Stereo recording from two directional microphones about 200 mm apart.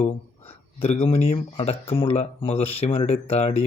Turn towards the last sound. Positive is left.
turn(degrees=30)  # may be behind; listen again after turning